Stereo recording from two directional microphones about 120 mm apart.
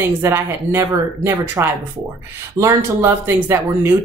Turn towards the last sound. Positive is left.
turn(degrees=-20)  # may be behind; listen again after turning